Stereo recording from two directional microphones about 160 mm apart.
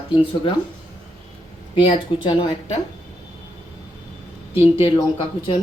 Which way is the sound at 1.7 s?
30° left (ahead or behind).